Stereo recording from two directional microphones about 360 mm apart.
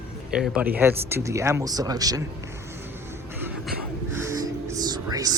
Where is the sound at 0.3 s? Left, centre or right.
Centre.